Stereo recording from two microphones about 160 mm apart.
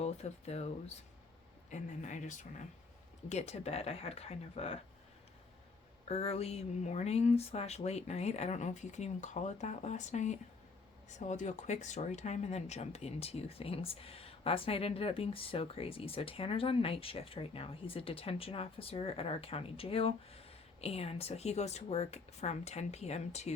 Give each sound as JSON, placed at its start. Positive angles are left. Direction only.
{"t": 0.0, "sound": "speech", "side_deg": 40}
{"t": 1.7, "sound": "speech", "side_deg": 50}
{"t": 6.1, "sound": "speech", "side_deg": 40}